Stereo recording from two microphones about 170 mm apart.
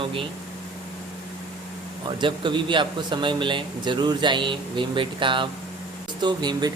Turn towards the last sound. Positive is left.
turn(degrees=-25)  # may be behind; listen again after turning